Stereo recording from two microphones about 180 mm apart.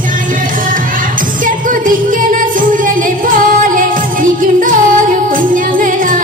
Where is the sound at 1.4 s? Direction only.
50° right (ahead or behind).